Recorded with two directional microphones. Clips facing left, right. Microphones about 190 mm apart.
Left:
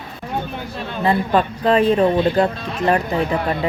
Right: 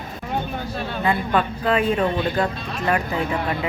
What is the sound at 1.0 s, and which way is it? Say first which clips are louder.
Speech: left 4 dB; 35° left (ahead or behind).